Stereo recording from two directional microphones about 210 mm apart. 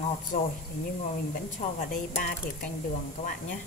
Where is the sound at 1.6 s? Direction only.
30° left (ahead or behind).